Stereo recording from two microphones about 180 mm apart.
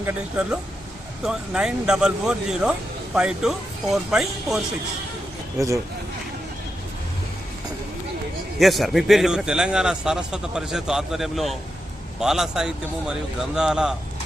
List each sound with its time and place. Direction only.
0.0 s a man's voice: 10° right (ahead or behind)
5.5 s speech: 15° right (ahead or behind)
8.5 s a man's voice: centre (ahead or behind)